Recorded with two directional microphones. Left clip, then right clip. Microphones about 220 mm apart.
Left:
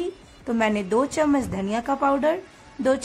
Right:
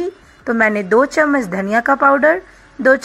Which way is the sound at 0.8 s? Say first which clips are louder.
Right 9 dB; 15° right (ahead or behind).